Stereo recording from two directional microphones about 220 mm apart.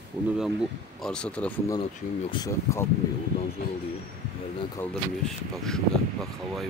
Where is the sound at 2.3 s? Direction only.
20° left (ahead or behind).